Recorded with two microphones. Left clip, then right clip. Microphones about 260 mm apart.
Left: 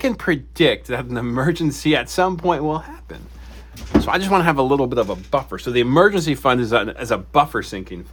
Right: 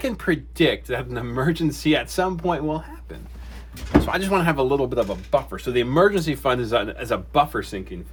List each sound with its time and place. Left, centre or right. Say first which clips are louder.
0.0 s speech: left 4 dB; left